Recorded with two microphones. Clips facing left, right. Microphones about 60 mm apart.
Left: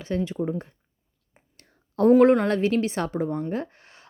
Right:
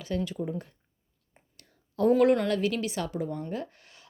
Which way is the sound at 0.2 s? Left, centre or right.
Left.